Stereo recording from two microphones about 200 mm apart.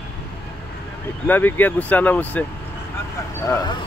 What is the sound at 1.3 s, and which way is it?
Speech, 10° left (ahead or behind).